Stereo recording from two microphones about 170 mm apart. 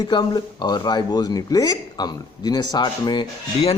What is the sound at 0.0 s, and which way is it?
Speech, 25° left (ahead or behind).